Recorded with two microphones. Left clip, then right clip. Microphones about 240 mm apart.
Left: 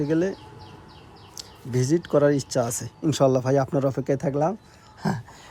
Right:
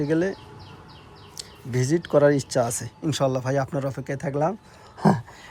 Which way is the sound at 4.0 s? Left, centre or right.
Centre.